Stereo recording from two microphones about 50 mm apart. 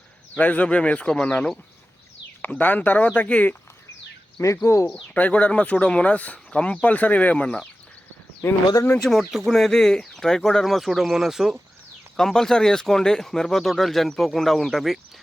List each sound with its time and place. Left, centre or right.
0.3 s speech: left
2.5 s speech: left
4.6 s speech: left
5.1 s speech: left
9.0 s speech: centre
12.1 s speech: centre